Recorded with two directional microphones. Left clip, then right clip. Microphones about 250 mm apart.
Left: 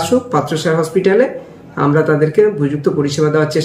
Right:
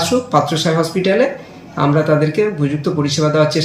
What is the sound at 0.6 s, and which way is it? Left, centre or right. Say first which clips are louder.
Speech: left 2 dB; centre.